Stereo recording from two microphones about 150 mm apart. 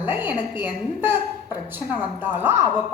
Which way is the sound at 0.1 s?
15° right (ahead or behind).